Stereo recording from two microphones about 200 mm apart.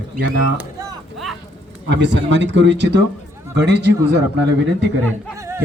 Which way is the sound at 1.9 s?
60° right (ahead or behind).